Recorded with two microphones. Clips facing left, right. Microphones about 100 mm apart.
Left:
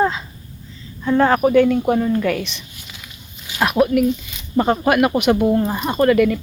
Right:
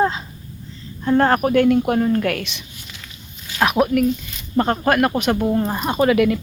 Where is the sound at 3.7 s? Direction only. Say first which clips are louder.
Left 2 dB; centre (ahead or behind).